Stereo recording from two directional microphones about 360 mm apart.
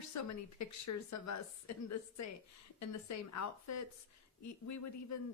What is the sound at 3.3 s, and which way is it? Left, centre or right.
Speech, left.